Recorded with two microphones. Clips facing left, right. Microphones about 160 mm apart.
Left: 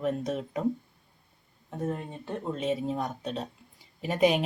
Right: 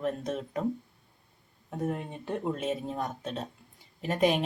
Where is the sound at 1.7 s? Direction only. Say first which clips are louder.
Even; 15° right (ahead or behind).